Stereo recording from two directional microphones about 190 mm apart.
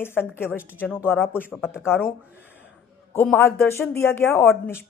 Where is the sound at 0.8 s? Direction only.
5° right (ahead or behind).